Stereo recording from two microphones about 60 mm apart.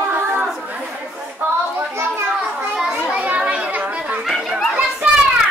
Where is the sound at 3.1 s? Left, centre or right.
Right.